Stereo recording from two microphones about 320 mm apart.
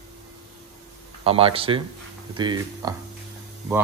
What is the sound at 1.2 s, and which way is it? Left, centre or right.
A man's voice, centre.